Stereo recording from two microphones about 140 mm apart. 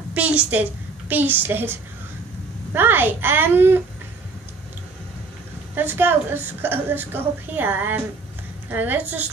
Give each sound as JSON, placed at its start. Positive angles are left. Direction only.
{"t": 0.1, "sound": "a woman's voice", "side_deg": -10}
{"t": 5.8, "sound": "a woman's voice", "side_deg": -15}